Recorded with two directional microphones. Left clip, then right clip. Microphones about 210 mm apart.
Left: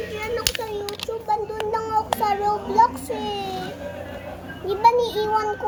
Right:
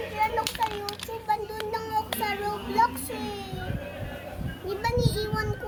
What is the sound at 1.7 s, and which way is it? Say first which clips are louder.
Child singing: left 6 dB; 45° right (ahead or behind).